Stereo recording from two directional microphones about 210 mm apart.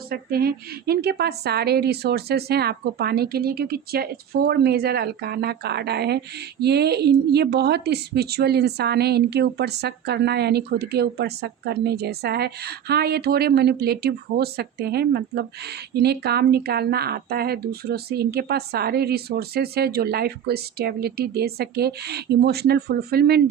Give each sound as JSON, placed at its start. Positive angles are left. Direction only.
{"t": 0.1, "sound": "a woman's voice", "side_deg": -45}